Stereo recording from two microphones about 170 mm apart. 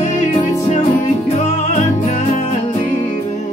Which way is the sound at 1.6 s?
45° left (ahead or behind).